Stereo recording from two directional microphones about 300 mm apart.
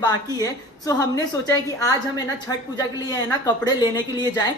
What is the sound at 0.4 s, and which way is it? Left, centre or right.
Speech, centre.